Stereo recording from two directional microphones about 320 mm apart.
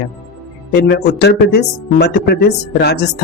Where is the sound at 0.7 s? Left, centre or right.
Left.